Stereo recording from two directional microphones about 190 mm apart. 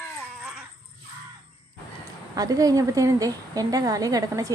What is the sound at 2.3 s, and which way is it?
A woman's voice, 20° right (ahead or behind).